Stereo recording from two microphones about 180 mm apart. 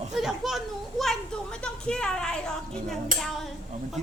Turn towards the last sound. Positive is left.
turn(degrees=0)  # may be behind; listen again after turning